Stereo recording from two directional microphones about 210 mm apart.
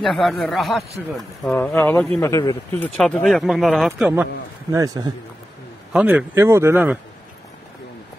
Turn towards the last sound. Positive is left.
turn(degrees=-10)  # may be behind; listen again after turning